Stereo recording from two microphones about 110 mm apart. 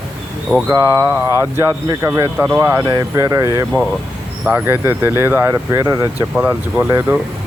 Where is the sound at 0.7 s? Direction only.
25° right (ahead or behind).